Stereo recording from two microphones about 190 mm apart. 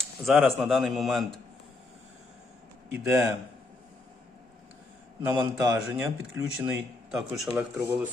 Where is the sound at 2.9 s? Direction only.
10° right (ahead or behind).